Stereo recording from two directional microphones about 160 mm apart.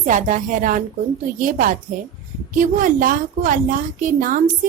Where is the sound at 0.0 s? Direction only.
50° right (ahead or behind).